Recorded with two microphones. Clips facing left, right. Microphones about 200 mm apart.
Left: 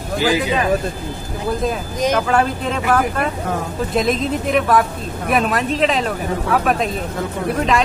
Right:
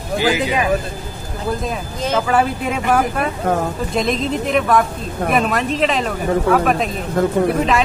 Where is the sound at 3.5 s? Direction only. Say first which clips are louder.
Right 5 dB; 55° right (ahead or behind).